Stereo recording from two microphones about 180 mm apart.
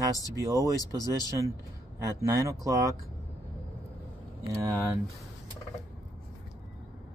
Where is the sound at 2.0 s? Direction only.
20° right (ahead or behind).